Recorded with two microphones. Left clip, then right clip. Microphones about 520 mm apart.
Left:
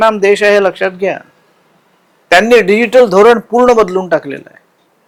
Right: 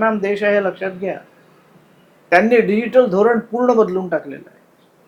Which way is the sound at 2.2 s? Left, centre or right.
Left.